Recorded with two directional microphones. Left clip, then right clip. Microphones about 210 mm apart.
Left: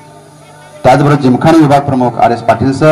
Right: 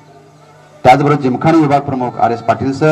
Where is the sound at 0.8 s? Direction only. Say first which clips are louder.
Left 1 dB; 30° left (ahead or behind).